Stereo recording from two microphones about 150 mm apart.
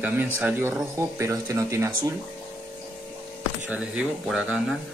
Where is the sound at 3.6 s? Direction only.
5° right (ahead or behind).